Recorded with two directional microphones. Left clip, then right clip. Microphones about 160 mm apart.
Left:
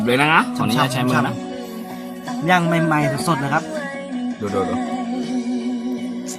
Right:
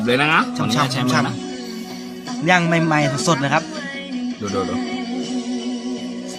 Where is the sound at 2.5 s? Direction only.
5° right (ahead or behind).